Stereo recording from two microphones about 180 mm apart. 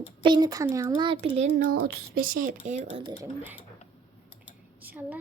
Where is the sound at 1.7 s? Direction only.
70° right (ahead or behind); by 3.0 s 40° right (ahead or behind).